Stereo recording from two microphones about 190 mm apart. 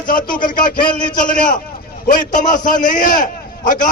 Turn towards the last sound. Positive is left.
turn(degrees=45)  # may be behind; listen again after turning